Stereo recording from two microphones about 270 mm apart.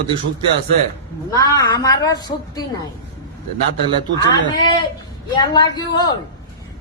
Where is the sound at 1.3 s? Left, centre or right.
Centre.